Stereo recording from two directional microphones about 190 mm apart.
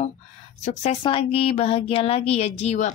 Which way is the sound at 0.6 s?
35° left (ahead or behind).